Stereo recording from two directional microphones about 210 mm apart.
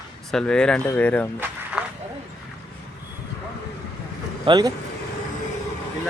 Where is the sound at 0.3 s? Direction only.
5° left (ahead or behind).